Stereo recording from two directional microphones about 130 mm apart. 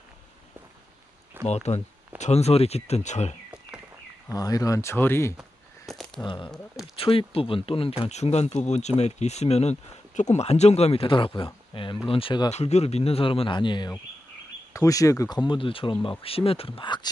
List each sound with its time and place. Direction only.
1.4 s speech: 60° left (ahead or behind)
4.3 s speech: 25° left (ahead or behind)
5.4 s a sound: centre (ahead or behind)
6.2 s speech: 40° left (ahead or behind)
12.5 s speech: 55° left (ahead or behind); by 13.9 s 35° left (ahead or behind)
14.7 s speech: 25° left (ahead or behind)